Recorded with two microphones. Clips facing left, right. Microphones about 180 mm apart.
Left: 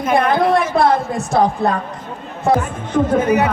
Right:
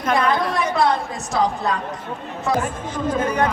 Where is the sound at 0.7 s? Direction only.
55° left (ahead or behind).